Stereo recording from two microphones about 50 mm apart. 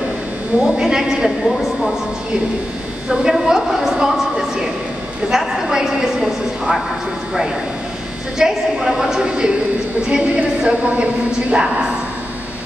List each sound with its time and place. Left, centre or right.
0.6 s a woman's voice: centre
3.1 s a sound: centre
8.4 s a woman's voice: centre